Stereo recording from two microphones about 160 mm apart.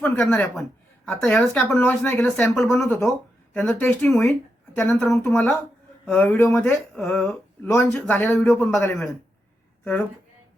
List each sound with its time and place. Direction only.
0.0 s speech: 5° left (ahead or behind)